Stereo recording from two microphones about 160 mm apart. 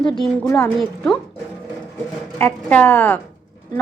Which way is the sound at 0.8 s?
5° left (ahead or behind).